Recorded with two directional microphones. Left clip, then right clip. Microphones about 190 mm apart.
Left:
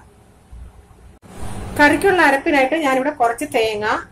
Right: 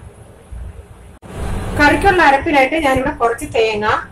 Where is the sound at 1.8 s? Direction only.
55° left (ahead or behind).